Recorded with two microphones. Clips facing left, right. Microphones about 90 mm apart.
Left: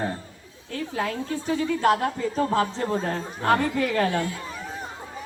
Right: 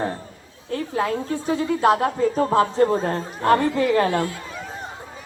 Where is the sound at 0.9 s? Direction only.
35° right (ahead or behind).